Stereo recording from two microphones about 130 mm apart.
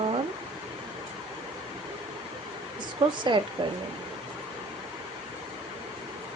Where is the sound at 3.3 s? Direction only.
40° right (ahead or behind).